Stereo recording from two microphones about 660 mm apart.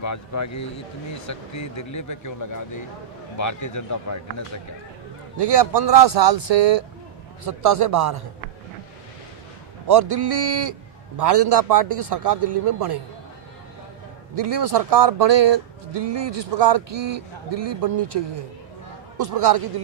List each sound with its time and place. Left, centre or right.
0.0 s speech: left
5.4 s speech: right
9.9 s speech: right
14.3 s speech: right